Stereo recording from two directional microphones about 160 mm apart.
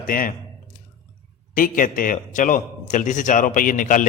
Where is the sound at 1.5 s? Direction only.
60° left (ahead or behind).